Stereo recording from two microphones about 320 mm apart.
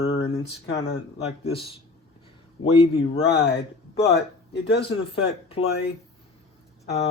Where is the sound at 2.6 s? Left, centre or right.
Centre.